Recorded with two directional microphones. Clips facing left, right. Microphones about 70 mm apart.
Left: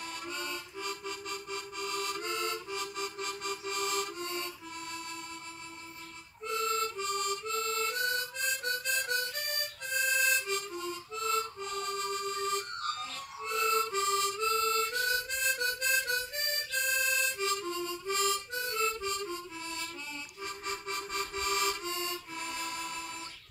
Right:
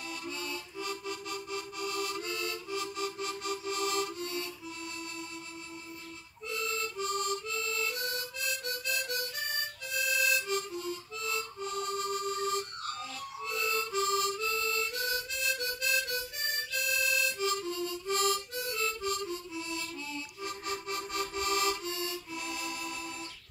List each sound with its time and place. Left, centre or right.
0.0 s music: left
6.4 s harmonica: left
12.5 s harmonica: left